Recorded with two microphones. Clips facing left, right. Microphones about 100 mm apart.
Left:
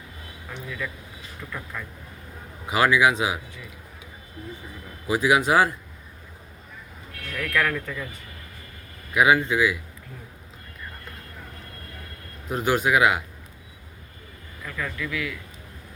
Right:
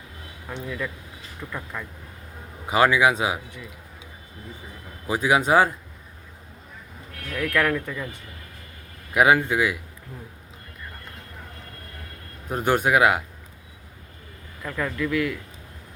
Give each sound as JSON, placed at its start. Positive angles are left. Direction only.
{"t": 0.5, "sound": "speech", "side_deg": -20}
{"t": 2.6, "sound": "speech", "side_deg": -35}
{"t": 5.0, "sound": "speech", "side_deg": -35}
{"t": 7.3, "sound": "speech", "side_deg": -15}
{"t": 9.1, "sound": "speech", "side_deg": -45}
{"t": 12.5, "sound": "speech", "side_deg": -45}
{"t": 14.6, "sound": "speech", "side_deg": -30}